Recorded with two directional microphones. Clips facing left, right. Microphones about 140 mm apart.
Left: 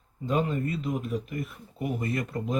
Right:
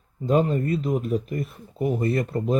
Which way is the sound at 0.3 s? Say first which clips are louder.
Right 6 dB; 40° right (ahead or behind).